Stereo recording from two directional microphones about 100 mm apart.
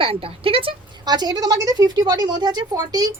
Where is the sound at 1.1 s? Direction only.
45° right (ahead or behind).